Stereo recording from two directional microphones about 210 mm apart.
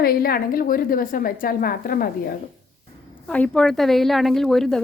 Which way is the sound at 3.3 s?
5° left (ahead or behind).